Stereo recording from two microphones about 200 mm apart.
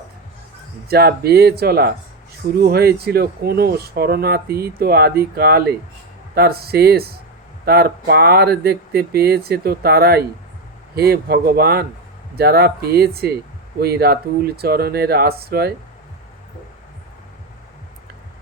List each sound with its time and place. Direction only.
0.9 s speech: 50° right (ahead or behind)